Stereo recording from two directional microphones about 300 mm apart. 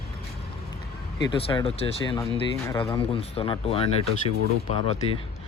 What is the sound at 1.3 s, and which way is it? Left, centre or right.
Speech, centre.